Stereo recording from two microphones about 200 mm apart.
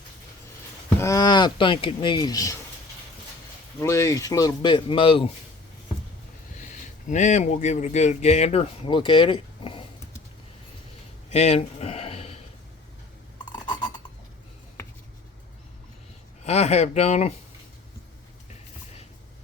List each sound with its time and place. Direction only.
0.9 s speech: 15° left (ahead or behind)
3.8 s speech: 15° left (ahead or behind)
6.6 s speech: 40° left (ahead or behind)
11.3 s a sound: 35° left (ahead or behind)
13.5 s a sound: 20° left (ahead or behind)
16.4 s speech: 35° left (ahead or behind)